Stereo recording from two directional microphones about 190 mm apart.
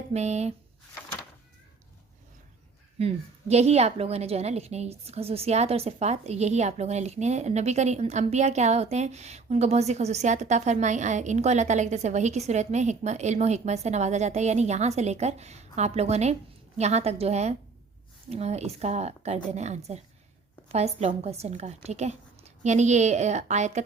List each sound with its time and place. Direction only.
0.1 s a woman's voice: 35° right (ahead or behind)
3.5 s a woman's voice: 35° right (ahead or behind)